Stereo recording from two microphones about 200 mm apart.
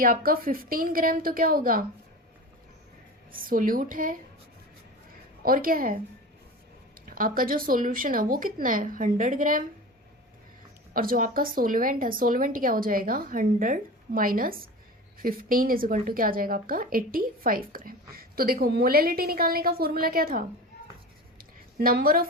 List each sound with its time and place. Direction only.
0.0 s speech: 45° right (ahead or behind)
3.3 s speech: 45° right (ahead or behind)
5.4 s speech: 45° right (ahead or behind)
7.1 s speech: 45° right (ahead or behind)
10.9 s speech: 45° right (ahead or behind)
21.3 s a sound: 45° right (ahead or behind)